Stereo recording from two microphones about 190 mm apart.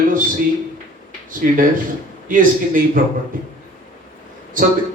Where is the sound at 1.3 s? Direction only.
45° right (ahead or behind).